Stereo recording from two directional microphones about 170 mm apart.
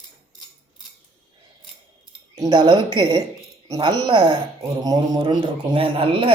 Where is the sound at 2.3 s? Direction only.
25° right (ahead or behind).